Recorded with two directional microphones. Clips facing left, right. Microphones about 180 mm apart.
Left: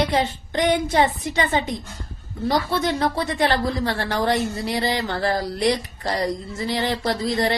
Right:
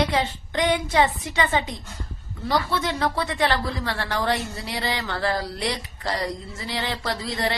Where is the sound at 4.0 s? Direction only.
15° left (ahead or behind).